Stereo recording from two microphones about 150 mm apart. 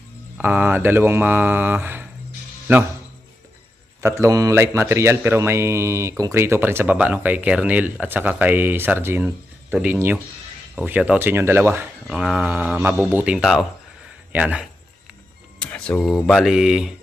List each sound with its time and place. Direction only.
0.3 s speech: 10° right (ahead or behind)
4.0 s speech: 20° right (ahead or behind)
15.5 s speech: 5° left (ahead or behind)